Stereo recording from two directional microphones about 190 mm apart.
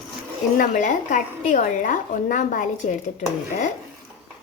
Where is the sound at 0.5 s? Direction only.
45° left (ahead or behind).